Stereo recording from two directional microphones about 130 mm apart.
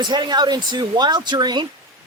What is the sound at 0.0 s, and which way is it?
Speech, 35° right (ahead or behind).